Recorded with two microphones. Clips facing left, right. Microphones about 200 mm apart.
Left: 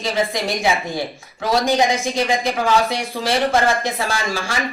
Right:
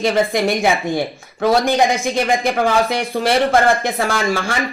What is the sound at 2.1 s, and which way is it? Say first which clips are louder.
Speech: right 3 dB; 55° right (ahead or behind).